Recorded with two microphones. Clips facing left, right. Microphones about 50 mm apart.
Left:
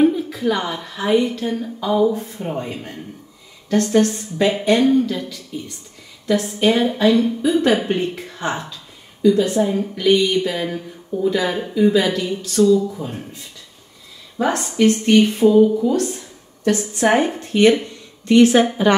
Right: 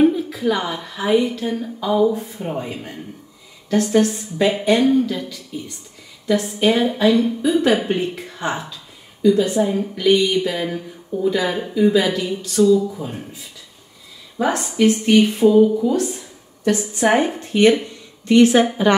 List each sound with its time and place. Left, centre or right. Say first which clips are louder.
0.0 s speech: even; centre
18.3 s a woman's voice: even; left